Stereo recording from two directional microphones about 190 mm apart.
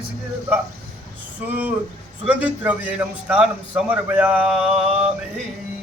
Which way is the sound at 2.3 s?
5° right (ahead or behind).